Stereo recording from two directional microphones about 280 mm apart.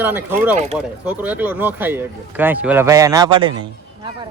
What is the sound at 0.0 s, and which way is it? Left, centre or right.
Speech, centre.